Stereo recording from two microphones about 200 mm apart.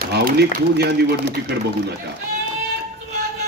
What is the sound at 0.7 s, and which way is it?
A man's voice, 55° right (ahead or behind).